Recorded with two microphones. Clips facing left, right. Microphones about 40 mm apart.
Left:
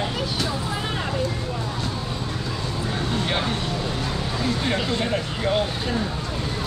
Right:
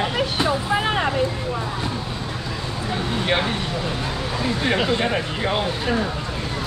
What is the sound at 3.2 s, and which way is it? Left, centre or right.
Speech, right.